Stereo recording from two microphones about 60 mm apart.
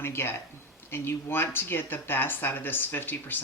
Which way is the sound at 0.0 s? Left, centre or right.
Left.